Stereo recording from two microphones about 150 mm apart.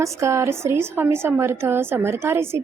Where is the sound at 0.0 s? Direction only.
20° right (ahead or behind).